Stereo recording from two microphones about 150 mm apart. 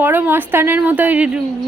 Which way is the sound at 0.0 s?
10° right (ahead or behind).